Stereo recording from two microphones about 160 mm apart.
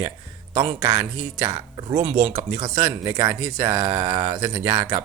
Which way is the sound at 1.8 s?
30° right (ahead or behind).